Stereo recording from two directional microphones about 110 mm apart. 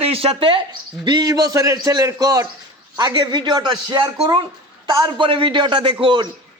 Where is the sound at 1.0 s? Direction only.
40° right (ahead or behind).